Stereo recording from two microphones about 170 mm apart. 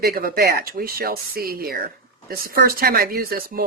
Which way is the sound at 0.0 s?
60° right (ahead or behind).